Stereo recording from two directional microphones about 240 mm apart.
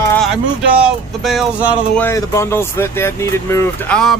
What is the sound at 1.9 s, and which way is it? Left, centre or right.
Speech, centre.